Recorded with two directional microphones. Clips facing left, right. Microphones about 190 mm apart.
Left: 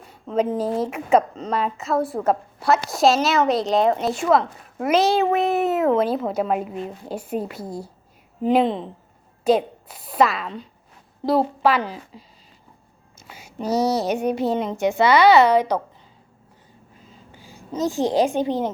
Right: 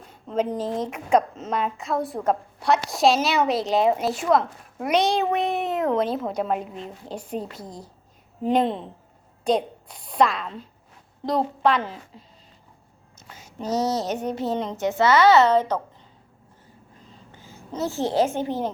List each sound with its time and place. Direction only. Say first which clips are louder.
0.0 s a woman's voice: left 3 dB; 5° left (ahead or behind)
17.3 s a woman's voice: left 4 dB; 15° left (ahead or behind)